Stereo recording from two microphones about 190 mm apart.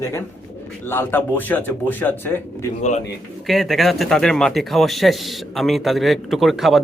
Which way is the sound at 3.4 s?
Centre (ahead or behind).